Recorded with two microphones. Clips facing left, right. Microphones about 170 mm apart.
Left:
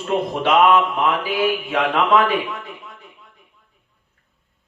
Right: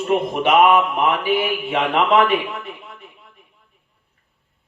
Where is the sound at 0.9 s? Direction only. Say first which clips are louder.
Right 2 dB; 25° right (ahead or behind).